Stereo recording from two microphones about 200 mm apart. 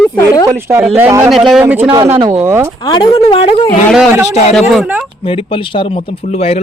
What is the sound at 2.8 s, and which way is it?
Speech, 20° left (ahead or behind).